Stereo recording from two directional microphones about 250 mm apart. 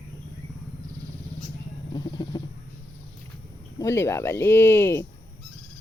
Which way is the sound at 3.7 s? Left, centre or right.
Centre.